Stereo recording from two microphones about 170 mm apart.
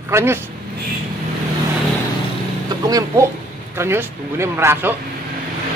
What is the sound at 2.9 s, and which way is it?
A man's voice, 20° right (ahead or behind).